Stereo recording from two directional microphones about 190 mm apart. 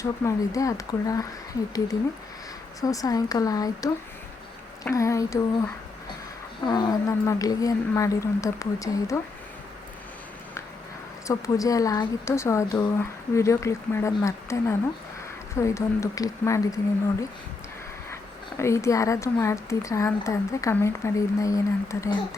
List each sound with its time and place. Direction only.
0.0 s speech: 15° left (ahead or behind)
2.8 s speech: 20° left (ahead or behind)
6.7 s speech: 20° left (ahead or behind)
11.3 s speech: 15° left (ahead or behind)